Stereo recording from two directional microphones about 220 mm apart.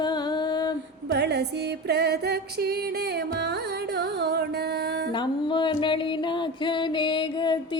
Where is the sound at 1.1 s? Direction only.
50° right (ahead or behind).